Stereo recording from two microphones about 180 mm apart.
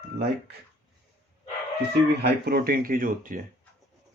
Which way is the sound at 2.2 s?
60° right (ahead or behind).